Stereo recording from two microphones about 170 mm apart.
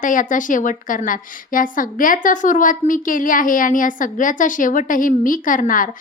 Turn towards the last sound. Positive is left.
turn(degrees=50)  # may be behind; listen again after turning